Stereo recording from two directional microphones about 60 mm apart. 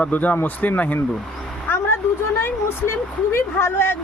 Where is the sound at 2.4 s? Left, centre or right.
Left.